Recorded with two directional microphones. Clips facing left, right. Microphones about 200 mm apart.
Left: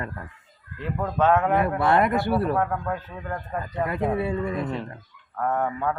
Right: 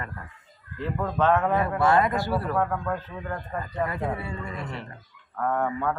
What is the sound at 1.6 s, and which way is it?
Speech, 60° left (ahead or behind).